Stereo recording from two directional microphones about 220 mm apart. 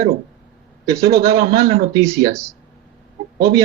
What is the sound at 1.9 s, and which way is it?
Speech, 15° right (ahead or behind).